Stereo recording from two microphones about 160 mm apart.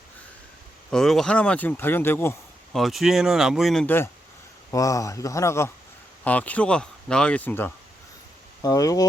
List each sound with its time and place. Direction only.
0.9 s speech: 5° left (ahead or behind)
2.7 s speech: centre (ahead or behind)
3.8 s speech: 15° left (ahead or behind)
8.6 s speech: 20° left (ahead or behind)